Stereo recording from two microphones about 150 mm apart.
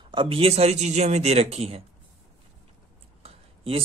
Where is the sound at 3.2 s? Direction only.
40° right (ahead or behind).